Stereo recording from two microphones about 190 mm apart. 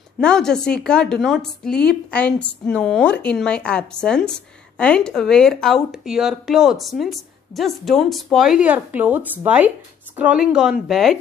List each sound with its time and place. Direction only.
0.2 s speech: 5° left (ahead or behind)